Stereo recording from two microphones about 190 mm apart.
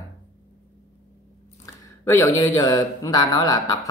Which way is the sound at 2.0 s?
15° left (ahead or behind).